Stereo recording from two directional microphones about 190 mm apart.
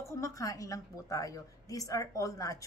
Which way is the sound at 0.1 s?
15° left (ahead or behind).